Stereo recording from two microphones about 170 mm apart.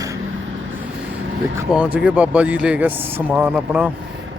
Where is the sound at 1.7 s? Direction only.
5° right (ahead or behind).